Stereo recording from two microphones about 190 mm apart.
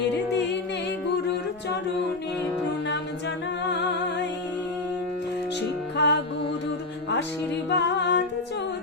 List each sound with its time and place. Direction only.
5.5 s music: 65° left (ahead or behind)
7.7 s music: 65° left (ahead or behind)